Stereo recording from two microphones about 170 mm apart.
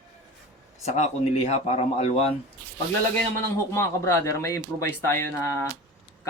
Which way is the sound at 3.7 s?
15° left (ahead or behind).